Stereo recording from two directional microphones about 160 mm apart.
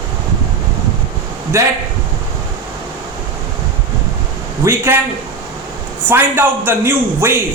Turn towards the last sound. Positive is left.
turn(degrees=-15)  # may be behind; listen again after turning